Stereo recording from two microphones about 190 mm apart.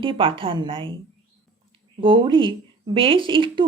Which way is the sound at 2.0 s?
25° right (ahead or behind).